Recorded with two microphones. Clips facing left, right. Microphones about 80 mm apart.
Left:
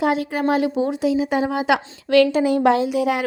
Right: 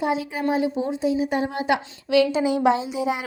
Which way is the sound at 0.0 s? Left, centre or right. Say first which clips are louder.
Left 4 dB; left.